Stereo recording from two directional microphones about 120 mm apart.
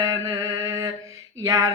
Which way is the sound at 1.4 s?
30° right (ahead or behind).